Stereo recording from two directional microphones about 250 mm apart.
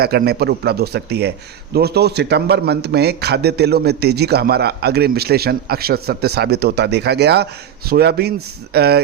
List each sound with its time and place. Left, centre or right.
0.0 s a man's voice: right